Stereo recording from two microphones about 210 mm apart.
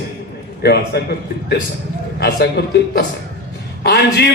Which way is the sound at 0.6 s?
50° left (ahead or behind).